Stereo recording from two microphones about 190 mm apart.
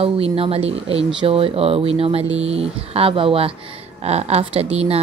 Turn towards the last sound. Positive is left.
turn(degrees=-30)  # may be behind; listen again after turning